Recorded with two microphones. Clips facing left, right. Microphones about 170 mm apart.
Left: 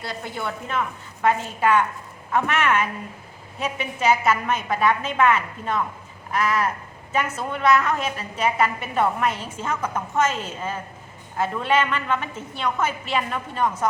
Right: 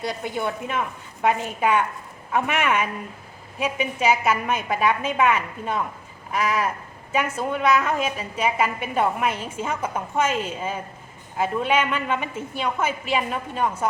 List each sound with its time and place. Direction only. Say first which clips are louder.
0.0 s a woman's voice: right 4 dB; 20° right (ahead or behind)
7.1 s a woman's voice: right 2 dB; 10° right (ahead or behind)